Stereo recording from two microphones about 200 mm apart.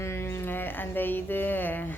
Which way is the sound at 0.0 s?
10° left (ahead or behind).